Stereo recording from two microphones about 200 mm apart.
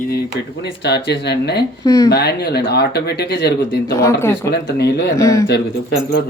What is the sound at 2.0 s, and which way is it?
Speech, 55° left (ahead or behind).